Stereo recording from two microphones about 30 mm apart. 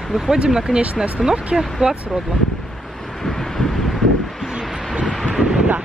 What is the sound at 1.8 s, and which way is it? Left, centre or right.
Speech, right.